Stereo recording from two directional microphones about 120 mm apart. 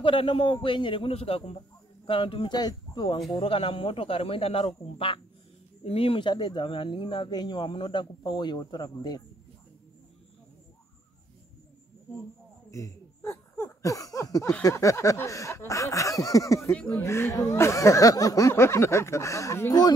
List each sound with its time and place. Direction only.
0.0 s speech: 45° left (ahead or behind)
2.5 s a man's voice: 35° left (ahead or behind)
3.3 s speech: 50° left (ahead or behind)
7.2 s a man's voice: 35° left (ahead or behind)
12.7 s a sound: 25° left (ahead or behind)
14.6 s speech: 25° left (ahead or behind)
16.7 s speech: 10° left (ahead or behind)
17.0 s speech: 25° left (ahead or behind)